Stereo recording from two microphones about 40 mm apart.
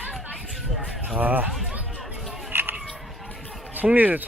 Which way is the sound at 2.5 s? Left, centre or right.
Right.